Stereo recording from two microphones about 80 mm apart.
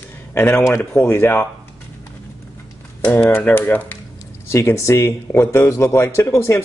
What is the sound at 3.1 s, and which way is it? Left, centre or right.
Speech, centre.